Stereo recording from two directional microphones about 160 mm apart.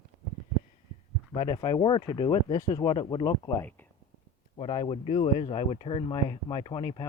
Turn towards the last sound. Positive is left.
turn(degrees=30)  # may be behind; listen again after turning